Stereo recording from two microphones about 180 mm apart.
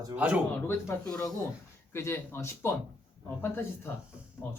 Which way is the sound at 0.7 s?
10° left (ahead or behind).